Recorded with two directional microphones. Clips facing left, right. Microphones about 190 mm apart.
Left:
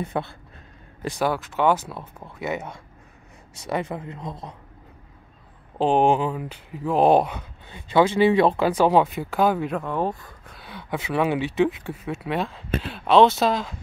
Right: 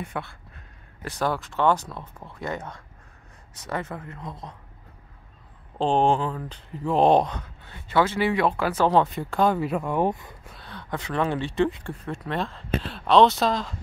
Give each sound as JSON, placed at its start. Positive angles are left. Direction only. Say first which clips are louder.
{"t": 0.0, "sound": "speech", "louder": "left 5 dB", "side_deg": 25}
{"t": 1.0, "sound": "speech", "louder": "left 3 dB", "side_deg": 10}
{"t": 5.8, "sound": "speech", "louder": "left 2 dB", "side_deg": 10}
{"t": 10.6, "sound": "speech", "louder": "left 3 dB", "side_deg": 10}